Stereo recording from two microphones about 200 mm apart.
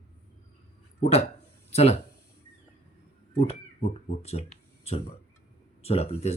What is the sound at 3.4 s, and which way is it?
Speech, 30° left (ahead or behind).